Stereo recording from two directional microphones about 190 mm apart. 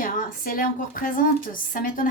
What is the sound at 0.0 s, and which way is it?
A woman's voice, 45° left (ahead or behind).